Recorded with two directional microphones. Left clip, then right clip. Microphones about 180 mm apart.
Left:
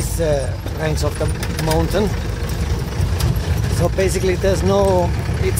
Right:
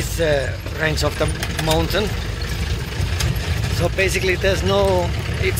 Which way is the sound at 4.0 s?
20° left (ahead or behind).